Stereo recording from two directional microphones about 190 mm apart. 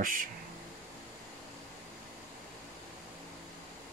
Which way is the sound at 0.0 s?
45° right (ahead or behind).